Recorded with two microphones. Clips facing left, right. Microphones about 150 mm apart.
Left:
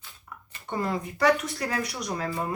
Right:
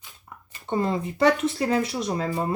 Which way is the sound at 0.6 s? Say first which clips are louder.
Right 4 dB; 25° right (ahead or behind).